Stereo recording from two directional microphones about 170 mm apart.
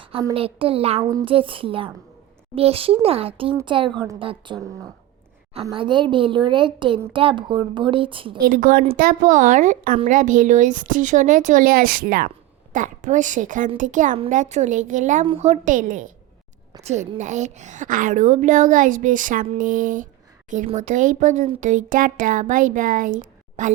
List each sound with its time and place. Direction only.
0.0 s a sound: 35° right (ahead or behind)
0.3 s speech: 35° right (ahead or behind)
3.9 s a woman's voice: 20° right (ahead or behind)
4.2 s a woman's voice: 30° right (ahead or behind)
5.7 s a woman's voice: 30° right (ahead or behind)
8.4 s a woman's voice: 55° right (ahead or behind)